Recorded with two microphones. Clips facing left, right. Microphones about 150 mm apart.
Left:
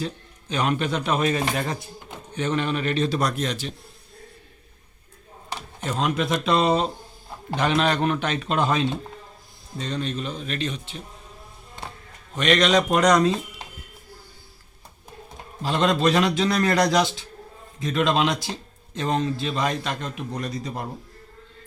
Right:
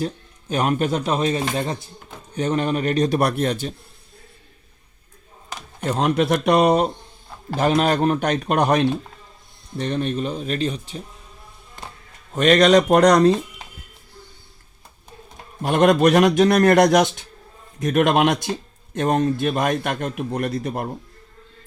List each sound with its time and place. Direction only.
0.0 s speech: 45° right (ahead or behind); by 1.7 s 25° right (ahead or behind)
2.3 s speech: 35° right (ahead or behind)
3.2 s a man's voice: 60° right (ahead or behind)
6.0 s a man's voice: 70° right (ahead or behind)
6.4 s a man's voice: 55° right (ahead or behind)
7.6 s speech: 40° right (ahead or behind)
8.6 s a man's voice: 70° right (ahead or behind)
9.7 s a man's voice: 60° right (ahead or behind)
10.2 s speech: 40° right (ahead or behind)
12.3 s a man's voice: 45° right (ahead or behind)
15.6 s a man's voice: 50° right (ahead or behind)